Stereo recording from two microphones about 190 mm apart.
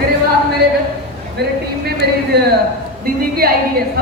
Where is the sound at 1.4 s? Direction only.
60° right (ahead or behind).